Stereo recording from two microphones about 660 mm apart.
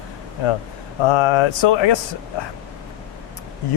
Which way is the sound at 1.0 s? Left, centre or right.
Left.